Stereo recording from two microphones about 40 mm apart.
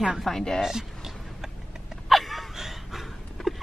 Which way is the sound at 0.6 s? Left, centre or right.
Centre.